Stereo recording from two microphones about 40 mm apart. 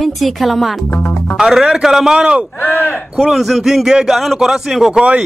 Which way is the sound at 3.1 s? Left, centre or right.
Centre.